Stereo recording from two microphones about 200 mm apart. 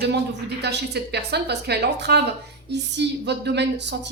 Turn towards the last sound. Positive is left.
turn(degrees=-60)  # may be behind; listen again after turning